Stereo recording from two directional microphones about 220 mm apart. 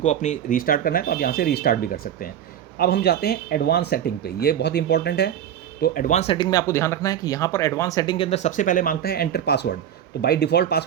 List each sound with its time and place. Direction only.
0.0 s speech: 30° left (ahead or behind); by 10.8 s 45° left (ahead or behind)